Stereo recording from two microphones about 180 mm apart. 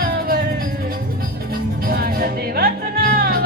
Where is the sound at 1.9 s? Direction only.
55° right (ahead or behind).